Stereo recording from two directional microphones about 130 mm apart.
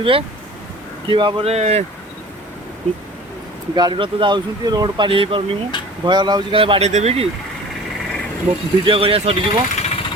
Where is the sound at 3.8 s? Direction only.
35° right (ahead or behind).